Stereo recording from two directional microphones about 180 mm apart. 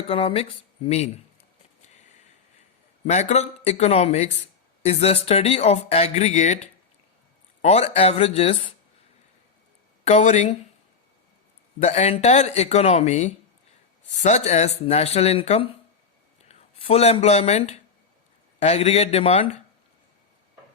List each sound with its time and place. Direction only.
0.1 s speech: 30° left (ahead or behind)
3.1 s speech: 40° left (ahead or behind)
7.6 s speech: 35° left (ahead or behind)
10.0 s speech: 35° left (ahead or behind)
11.8 s speech: 40° left (ahead or behind)